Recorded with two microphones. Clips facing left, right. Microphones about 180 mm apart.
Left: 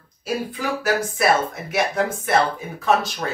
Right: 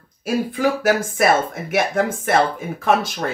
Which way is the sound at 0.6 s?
50° right (ahead or behind).